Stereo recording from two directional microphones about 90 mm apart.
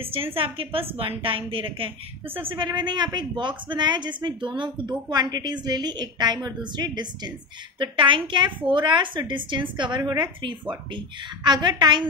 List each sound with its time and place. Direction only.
0.0 s a woman's voice: 90° right
2.4 s a woman's voice: 65° right (ahead or behind)
7.8 s a woman's voice: 70° right (ahead or behind)